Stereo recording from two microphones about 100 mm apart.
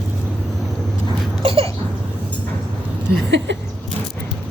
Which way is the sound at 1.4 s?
70° right (ahead or behind).